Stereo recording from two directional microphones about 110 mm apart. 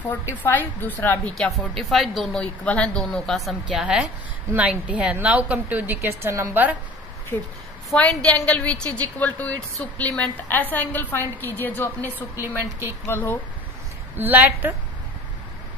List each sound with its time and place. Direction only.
0.4 s a woman's voice: 20° left (ahead or behind)
1.3 s a woman's voice: 5° left (ahead or behind); by 6.6 s 25° right (ahead or behind)
7.3 s a woman's voice: 10° left (ahead or behind)
14.1 s speech: 15° right (ahead or behind)